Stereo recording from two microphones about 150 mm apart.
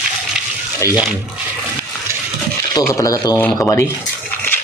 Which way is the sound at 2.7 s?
25° left (ahead or behind).